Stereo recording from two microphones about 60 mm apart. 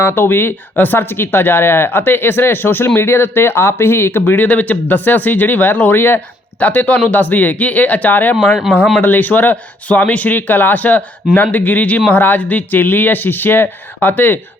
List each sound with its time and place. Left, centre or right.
0.0 s speech: left
4.4 s speech: left